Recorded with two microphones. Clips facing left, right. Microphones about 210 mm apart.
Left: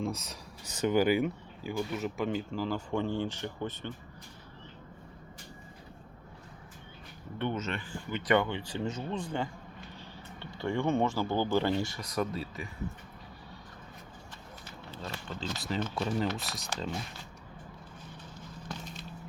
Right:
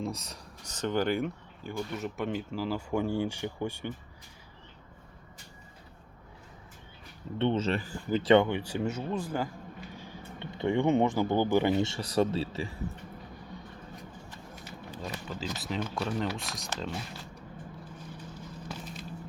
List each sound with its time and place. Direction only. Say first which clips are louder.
0.0 s speech: left 1 dB; centre (ahead or behind)
7.3 s speech: right 6 dB; 25° right (ahead or behind); by 9.5 s 5° right (ahead or behind)
9.9 s a sound: right 3 dB; 10° right (ahead or behind)
11.8 s speech: right 5 dB; 30° right (ahead or behind)
14.8 s speech: right 2 dB; 15° right (ahead or behind)